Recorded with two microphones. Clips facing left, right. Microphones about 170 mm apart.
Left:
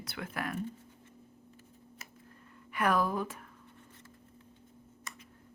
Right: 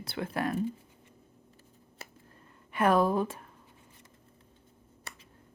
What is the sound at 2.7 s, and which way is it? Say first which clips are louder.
Speech: right 5 dB; 25° right (ahead or behind).